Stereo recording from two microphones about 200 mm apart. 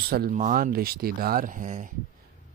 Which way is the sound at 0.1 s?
45° right (ahead or behind).